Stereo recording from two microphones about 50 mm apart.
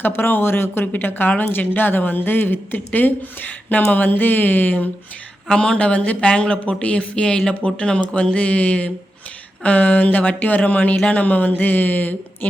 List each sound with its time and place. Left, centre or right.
0.0 s speech: left
5.5 s speech: centre; by 12.5 s left